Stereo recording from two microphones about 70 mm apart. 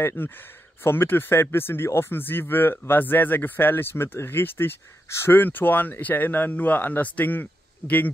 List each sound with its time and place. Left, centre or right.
0.0 s speech: left